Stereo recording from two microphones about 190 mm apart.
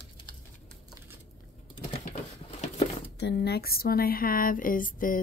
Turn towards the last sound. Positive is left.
turn(degrees=45)  # may be behind; listen again after turning